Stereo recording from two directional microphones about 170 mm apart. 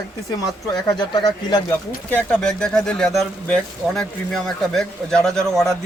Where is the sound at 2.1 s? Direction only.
5° left (ahead or behind).